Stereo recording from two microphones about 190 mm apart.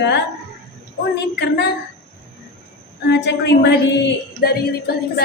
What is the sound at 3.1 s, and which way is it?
A woman's voice, 60° left (ahead or behind).